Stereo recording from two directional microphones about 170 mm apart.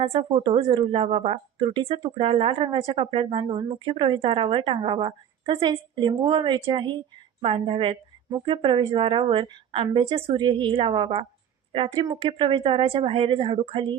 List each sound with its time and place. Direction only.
0.0 s speech: 35° right (ahead or behind)